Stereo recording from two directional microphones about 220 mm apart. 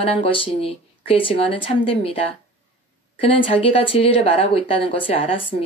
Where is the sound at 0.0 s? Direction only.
25° left (ahead or behind).